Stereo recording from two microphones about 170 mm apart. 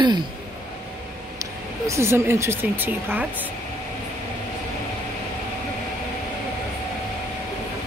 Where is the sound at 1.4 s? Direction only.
15° right (ahead or behind).